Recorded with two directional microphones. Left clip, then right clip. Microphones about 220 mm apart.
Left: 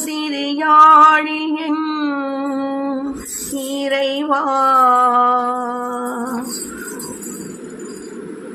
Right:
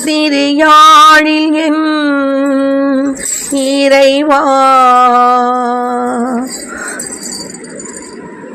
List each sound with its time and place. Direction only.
0.0 s music: 35° right (ahead or behind)
1.7 s music: 25° right (ahead or behind)
3.8 s a sound: 35° right (ahead or behind)